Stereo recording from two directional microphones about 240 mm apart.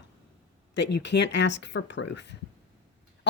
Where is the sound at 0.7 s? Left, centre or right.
Left.